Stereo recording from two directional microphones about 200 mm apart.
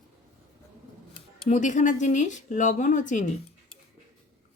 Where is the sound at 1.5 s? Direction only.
40° left (ahead or behind).